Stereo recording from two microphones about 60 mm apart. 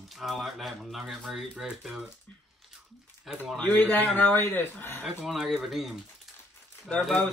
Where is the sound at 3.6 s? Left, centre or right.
Left.